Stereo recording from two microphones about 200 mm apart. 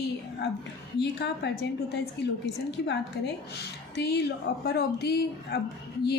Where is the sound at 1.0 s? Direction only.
60° left (ahead or behind).